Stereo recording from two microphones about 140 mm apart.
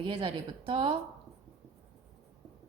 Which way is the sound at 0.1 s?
40° right (ahead or behind).